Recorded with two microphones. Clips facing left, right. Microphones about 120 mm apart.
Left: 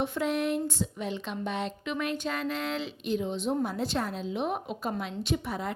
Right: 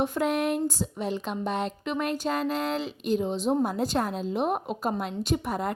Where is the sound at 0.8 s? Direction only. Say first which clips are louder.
Right 3 dB; 40° right (ahead or behind).